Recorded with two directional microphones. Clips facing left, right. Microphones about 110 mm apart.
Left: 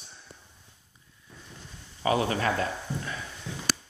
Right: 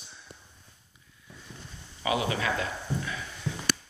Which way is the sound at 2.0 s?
40° left (ahead or behind).